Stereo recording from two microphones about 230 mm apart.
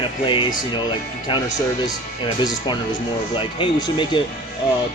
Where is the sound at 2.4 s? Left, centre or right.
Centre.